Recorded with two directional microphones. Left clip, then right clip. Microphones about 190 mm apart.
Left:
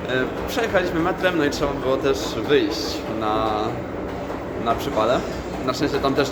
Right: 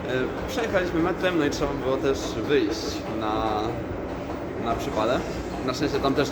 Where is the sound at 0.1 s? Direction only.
5° left (ahead or behind).